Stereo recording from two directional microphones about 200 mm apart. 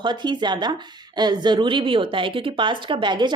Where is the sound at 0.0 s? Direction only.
20° right (ahead or behind).